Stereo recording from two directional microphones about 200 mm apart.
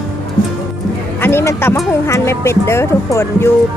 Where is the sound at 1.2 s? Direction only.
10° left (ahead or behind).